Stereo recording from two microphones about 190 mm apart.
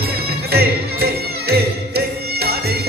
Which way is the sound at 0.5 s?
55° right (ahead or behind).